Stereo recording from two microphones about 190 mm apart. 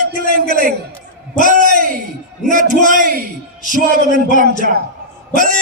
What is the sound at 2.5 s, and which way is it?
Speech, 45° right (ahead or behind).